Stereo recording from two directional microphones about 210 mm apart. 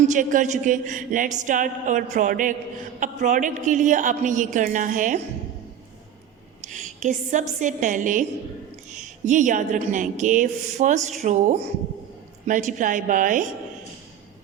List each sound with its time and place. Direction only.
0.0 s speech: 35° right (ahead or behind)
6.6 s a sound: 35° right (ahead or behind)
7.6 s speech: 35° right (ahead or behind)